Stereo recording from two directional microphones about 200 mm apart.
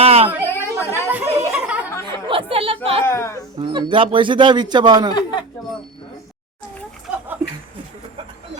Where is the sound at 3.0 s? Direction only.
15° left (ahead or behind).